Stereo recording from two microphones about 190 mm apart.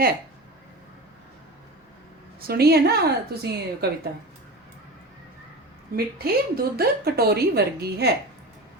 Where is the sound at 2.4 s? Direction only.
55° right (ahead or behind).